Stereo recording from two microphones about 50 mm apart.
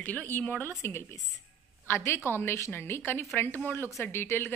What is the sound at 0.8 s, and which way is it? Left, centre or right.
A woman's voice, left.